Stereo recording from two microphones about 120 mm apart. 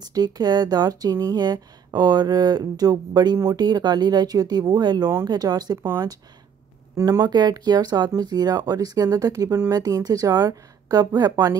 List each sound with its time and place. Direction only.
0.1 s speech: 35° right (ahead or behind)
7.0 s speech: 30° right (ahead or behind)